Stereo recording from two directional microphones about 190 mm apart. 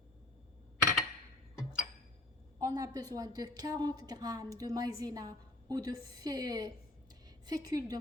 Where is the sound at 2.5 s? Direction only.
20° right (ahead or behind).